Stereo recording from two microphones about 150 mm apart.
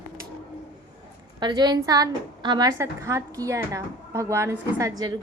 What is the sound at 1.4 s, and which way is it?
A woman's voice, 25° right (ahead or behind).